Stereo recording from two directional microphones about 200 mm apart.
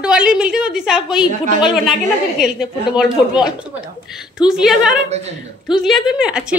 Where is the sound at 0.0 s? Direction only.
5° right (ahead or behind).